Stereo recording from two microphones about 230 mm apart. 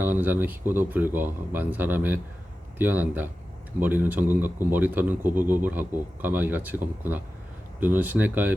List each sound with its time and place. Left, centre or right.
0.0 s speech: centre